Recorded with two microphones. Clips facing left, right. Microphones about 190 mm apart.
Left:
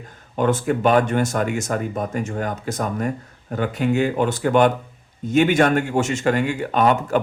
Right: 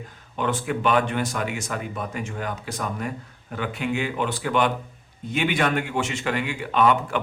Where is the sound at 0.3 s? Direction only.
45° left (ahead or behind).